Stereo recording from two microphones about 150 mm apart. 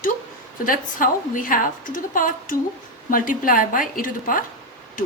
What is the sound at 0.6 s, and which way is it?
A woman's voice, 70° left (ahead or behind).